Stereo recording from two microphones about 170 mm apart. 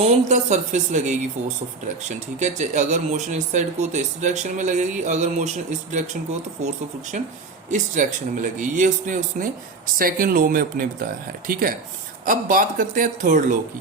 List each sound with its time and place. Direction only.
0.0 s speech: 40° right (ahead or behind)
7.1 s speech: 45° right (ahead or behind)